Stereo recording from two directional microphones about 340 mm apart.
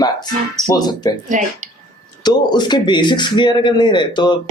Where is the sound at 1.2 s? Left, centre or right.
Right.